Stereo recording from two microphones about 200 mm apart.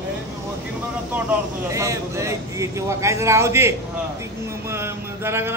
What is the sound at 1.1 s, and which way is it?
Speech, 10° right (ahead or behind).